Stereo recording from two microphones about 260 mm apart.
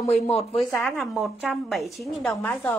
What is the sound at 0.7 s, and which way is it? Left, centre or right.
A woman's voice, centre.